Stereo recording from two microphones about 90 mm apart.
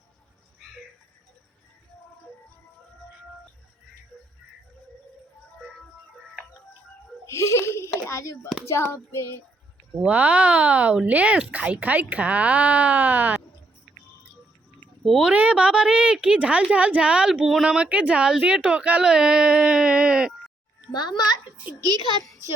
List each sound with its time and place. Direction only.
7.3 s giggle: 30° left (ahead or behind)
7.9 s a sound: 30° left (ahead or behind)
8.6 s hands: 30° left (ahead or behind)
10.0 s a woman's voice: 15° right (ahead or behind)
15.2 s a woman's voice: 15° right (ahead or behind)
20.9 s a child's voice: 50° left (ahead or behind)
21.8 s a child's voice: 40° right (ahead or behind)